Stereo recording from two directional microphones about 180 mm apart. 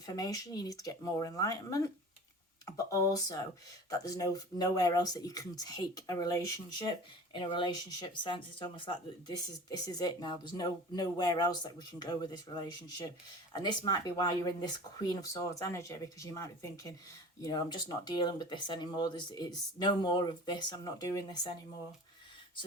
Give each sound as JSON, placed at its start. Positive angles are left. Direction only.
{"t": 0.0, "sound": "speech", "side_deg": 20}